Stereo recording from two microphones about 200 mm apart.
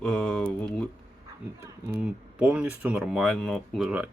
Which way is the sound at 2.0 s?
5° right (ahead or behind).